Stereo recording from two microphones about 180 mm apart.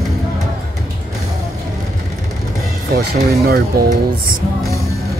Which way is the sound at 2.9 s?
55° right (ahead or behind).